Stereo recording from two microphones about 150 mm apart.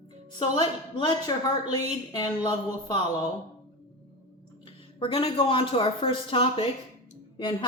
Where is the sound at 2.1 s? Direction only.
30° left (ahead or behind).